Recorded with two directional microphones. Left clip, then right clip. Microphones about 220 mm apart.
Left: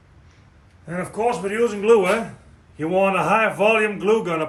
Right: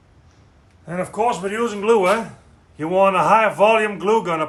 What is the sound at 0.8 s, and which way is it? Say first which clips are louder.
Speech: right 2 dB; 20° right (ahead or behind).